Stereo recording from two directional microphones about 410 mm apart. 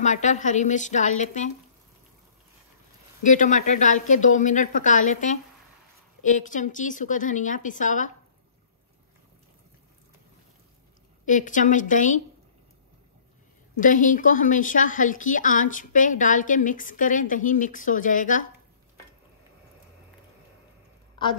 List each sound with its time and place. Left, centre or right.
0.0 s speech: centre
3.3 s a woman's voice: centre
11.2 s speech: centre
13.7 s a woman's voice: centre